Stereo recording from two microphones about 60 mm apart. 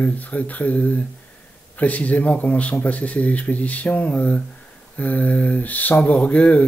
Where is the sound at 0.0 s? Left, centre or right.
Left.